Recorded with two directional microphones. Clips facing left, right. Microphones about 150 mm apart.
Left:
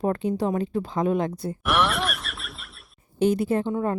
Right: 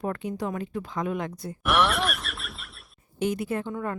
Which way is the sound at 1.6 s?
Centre (ahead or behind).